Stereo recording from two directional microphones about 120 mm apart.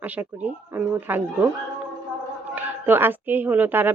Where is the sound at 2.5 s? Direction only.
15° right (ahead or behind).